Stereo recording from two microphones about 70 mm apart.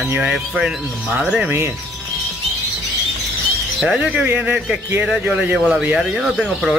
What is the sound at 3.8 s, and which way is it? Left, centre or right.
Speech, centre.